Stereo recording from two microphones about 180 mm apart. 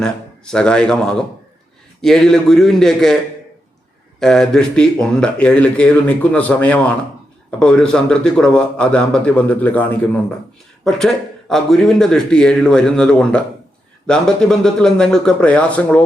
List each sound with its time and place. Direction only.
0.0 s a man's voice: 5° left (ahead or behind)
4.2 s speech: 5° left (ahead or behind)